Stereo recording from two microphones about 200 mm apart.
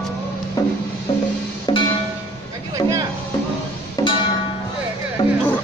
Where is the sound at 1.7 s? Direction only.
25° left (ahead or behind).